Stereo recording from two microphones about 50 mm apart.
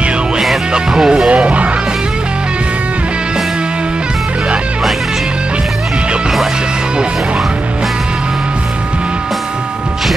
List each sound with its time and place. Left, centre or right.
0.7 s music: centre
1.3 s music: right